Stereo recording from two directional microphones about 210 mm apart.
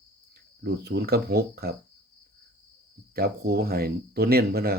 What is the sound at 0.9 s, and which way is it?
Speech, 50° right (ahead or behind).